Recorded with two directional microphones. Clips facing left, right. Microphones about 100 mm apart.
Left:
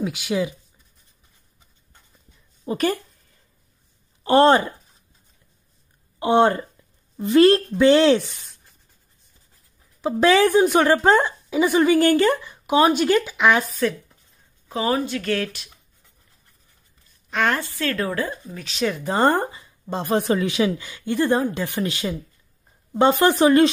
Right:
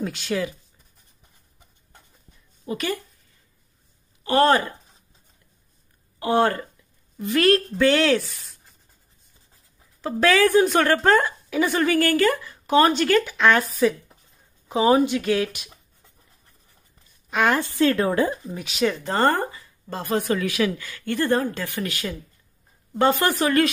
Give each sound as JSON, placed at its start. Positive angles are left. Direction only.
{"t": 0.0, "sound": "a woman's voice", "side_deg": 10}
{"t": 2.7, "sound": "speech", "side_deg": 30}
{"t": 4.2, "sound": "speech", "side_deg": 30}
{"t": 6.1, "sound": "speech", "side_deg": 20}
{"t": 10.0, "sound": "a woman's voice", "side_deg": 20}
{"t": 13.7, "sound": "speech", "side_deg": -10}
{"t": 17.3, "sound": "a sound", "side_deg": -5}
{"t": 17.6, "sound": "a woman's voice", "side_deg": -20}
{"t": 18.7, "sound": "speech", "side_deg": -5}
{"t": 19.0, "sound": "speech", "side_deg": 15}